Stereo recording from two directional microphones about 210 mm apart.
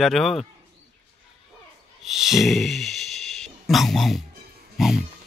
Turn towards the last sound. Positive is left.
turn(degrees=0)  # may be behind; listen again after turning